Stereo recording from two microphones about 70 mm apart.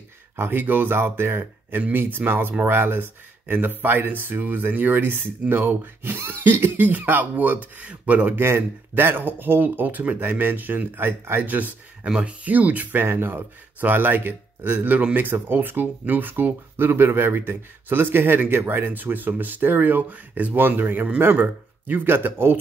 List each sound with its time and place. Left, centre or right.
0.4 s speech: right
8.5 s speech: right
11.4 s speech: right